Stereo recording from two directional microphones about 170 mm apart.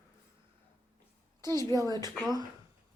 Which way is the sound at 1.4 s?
15° left (ahead or behind).